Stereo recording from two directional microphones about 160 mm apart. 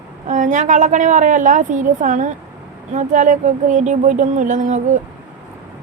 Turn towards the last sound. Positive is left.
turn(degrees=-50)  # may be behind; listen again after turning